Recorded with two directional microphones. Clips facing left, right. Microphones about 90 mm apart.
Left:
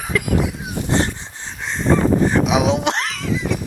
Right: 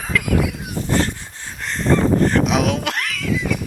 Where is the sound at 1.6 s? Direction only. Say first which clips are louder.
Even; 5° left (ahead or behind).